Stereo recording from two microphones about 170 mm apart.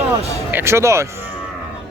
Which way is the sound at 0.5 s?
15° right (ahead or behind).